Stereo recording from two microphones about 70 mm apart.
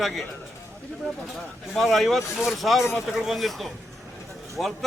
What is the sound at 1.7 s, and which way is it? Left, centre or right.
Speech, centre.